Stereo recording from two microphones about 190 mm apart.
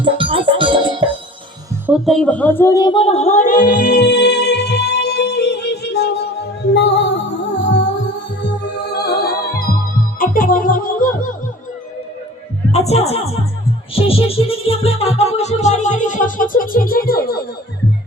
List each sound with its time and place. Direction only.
0.0 s music: 30° right (ahead or behind)
1.9 s music: centre (ahead or behind); by 11.3 s 45° left (ahead or behind)
12.7 s speech: 35° left (ahead or behind); by 17.4 s 55° left (ahead or behind)